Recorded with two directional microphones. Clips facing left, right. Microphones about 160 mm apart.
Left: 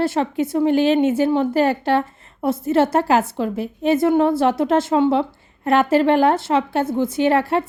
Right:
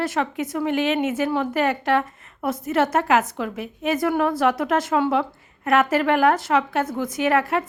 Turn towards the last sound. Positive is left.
turn(degrees=30)  # may be behind; listen again after turning